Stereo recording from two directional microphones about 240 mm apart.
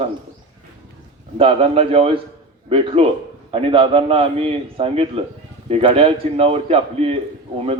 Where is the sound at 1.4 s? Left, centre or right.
Right.